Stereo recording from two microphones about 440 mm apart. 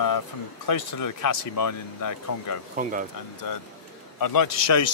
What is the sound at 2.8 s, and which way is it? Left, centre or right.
Speech, centre.